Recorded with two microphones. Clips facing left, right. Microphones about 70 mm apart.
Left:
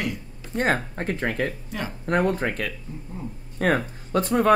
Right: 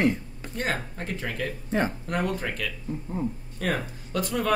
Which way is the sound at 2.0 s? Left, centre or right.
Left.